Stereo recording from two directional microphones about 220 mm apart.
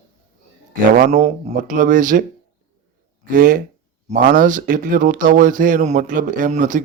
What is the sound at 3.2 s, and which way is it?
Speech, 40° right (ahead or behind).